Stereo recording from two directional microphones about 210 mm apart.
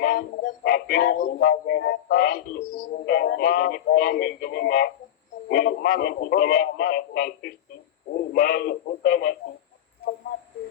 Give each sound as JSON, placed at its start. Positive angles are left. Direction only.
{"t": 0.0, "sound": "music", "side_deg": 50}